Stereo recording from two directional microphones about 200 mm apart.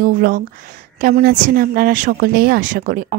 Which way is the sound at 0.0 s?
45° right (ahead or behind).